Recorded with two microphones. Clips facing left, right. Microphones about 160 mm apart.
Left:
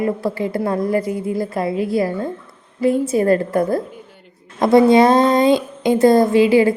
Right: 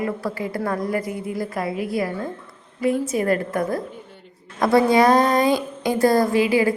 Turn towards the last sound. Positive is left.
turn(degrees=25)  # may be behind; listen again after turning